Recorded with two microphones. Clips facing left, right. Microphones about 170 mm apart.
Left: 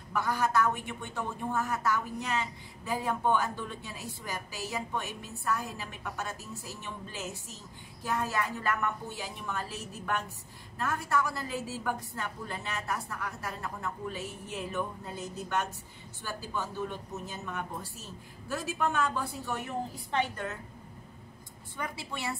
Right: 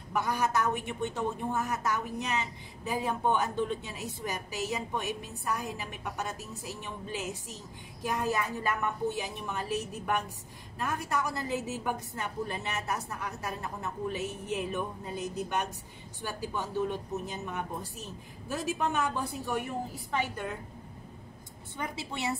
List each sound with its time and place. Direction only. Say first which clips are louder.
0.1 s a woman's voice: even; 20° right (ahead or behind)
21.7 s a woman's voice: right 1 dB; 20° right (ahead or behind)